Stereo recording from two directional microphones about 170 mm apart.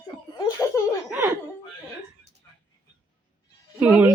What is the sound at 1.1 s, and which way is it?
Speech, 15° right (ahead or behind).